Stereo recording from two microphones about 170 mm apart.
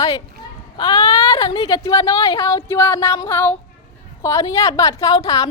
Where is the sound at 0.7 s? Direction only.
20° left (ahead or behind).